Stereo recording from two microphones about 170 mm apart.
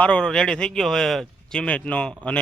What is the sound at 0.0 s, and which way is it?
Speech, 5° left (ahead or behind).